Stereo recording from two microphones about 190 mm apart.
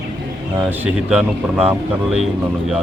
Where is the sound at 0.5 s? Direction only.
10° right (ahead or behind).